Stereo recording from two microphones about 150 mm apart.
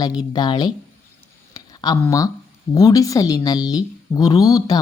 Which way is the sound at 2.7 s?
25° left (ahead or behind).